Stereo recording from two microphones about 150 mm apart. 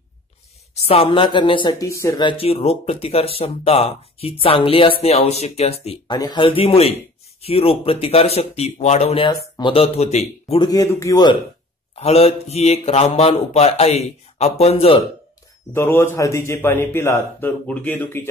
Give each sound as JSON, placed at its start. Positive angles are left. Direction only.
{"t": 0.8, "sound": "speech", "side_deg": 40}
{"t": 2.2, "sound": "speech", "side_deg": 40}
{"t": 6.0, "sound": "speech", "side_deg": 30}
{"t": 10.6, "sound": "speech", "side_deg": 25}
{"t": 11.9, "sound": "speech", "side_deg": 40}
{"t": 15.7, "sound": "a man's voice", "side_deg": 15}